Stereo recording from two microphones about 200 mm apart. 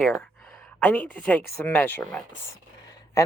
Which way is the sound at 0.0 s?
Centre (ahead or behind).